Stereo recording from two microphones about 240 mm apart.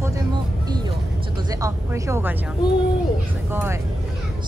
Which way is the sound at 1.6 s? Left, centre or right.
Centre.